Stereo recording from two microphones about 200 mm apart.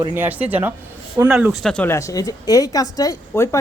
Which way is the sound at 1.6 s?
5° left (ahead or behind).